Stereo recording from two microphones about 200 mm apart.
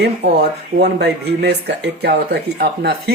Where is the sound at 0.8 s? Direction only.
55° right (ahead or behind).